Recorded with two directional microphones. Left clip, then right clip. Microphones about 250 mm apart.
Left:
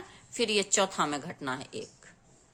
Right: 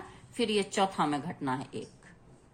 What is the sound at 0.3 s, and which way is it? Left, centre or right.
A woman's voice, left.